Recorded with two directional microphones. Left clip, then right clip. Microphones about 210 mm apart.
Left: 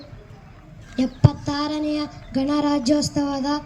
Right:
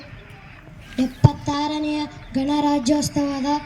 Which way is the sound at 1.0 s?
10° right (ahead or behind).